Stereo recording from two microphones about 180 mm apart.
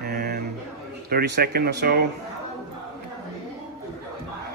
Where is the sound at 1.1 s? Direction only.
60° right (ahead or behind).